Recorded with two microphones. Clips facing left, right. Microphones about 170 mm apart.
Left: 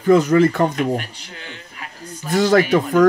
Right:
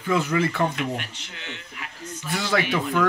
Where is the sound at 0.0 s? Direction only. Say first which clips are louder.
Left 10 dB; 40° left (ahead or behind).